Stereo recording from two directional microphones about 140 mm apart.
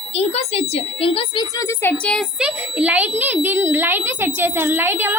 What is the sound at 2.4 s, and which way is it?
A child's voice, 10° right (ahead or behind).